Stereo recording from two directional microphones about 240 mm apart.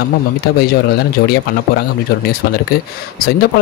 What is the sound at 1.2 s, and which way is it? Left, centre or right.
Speech, left.